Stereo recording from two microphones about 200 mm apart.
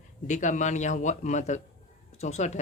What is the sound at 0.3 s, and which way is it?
A man's voice, 40° left (ahead or behind).